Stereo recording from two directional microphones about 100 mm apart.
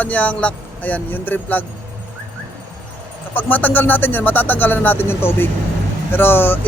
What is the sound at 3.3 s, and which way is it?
Speech, 15° left (ahead or behind).